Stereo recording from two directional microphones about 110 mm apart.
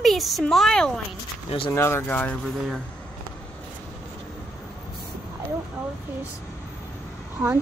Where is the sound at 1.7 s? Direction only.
20° left (ahead or behind).